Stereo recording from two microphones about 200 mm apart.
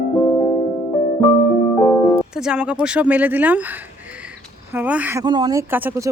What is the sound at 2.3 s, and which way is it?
Speech, 5° right (ahead or behind).